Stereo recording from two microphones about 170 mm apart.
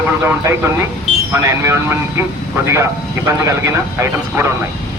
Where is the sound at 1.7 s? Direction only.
15° right (ahead or behind).